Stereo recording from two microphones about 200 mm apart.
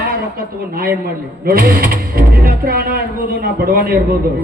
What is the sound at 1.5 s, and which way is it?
A man's voice, 45° right (ahead or behind).